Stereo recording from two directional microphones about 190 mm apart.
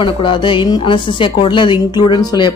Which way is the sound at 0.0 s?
25° left (ahead or behind).